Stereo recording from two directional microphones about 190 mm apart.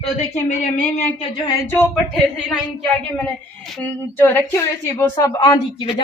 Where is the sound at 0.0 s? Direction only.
40° left (ahead or behind).